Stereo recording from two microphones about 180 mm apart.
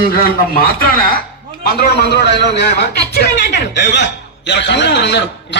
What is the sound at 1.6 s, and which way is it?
A man's voice, 60° left (ahead or behind).